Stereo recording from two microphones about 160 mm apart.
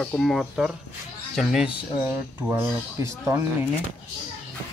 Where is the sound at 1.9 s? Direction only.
10° right (ahead or behind).